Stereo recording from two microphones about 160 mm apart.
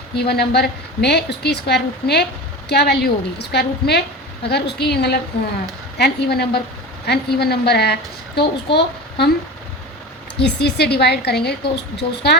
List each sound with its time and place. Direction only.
0.2 s a woman's voice: 90° left
10.4 s a woman's voice: 90° left